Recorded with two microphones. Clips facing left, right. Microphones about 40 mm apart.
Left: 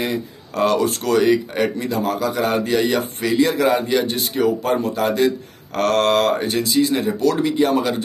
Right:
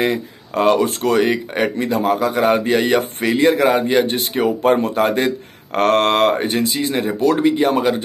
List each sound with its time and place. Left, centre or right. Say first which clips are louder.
0.0 s speech: right 4 dB; right
7.0 s speech: right 2 dB; right